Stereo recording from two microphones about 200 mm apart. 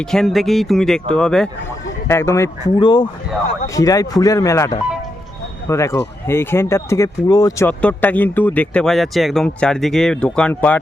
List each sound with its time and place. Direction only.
0.0 s speech: centre (ahead or behind)
2.0 s speech: 15° left (ahead or behind)
7.7 s speech: 5° left (ahead or behind)